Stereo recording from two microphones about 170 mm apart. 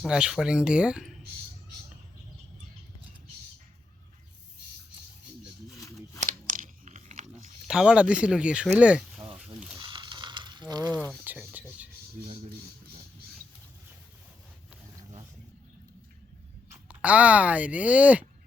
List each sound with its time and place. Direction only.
0.0 s speech: 5° right (ahead or behind)
6.1 s crunch: 50° right (ahead or behind)
7.7 s speech: 5° right (ahead or behind)
9.4 s a sound: 5° right (ahead or behind)
9.7 s mechanisms: 25° right (ahead or behind)
10.9 s speech: 10° left (ahead or behind)
11.2 s a sound: 10° right (ahead or behind)
16.9 s speech: 10° right (ahead or behind)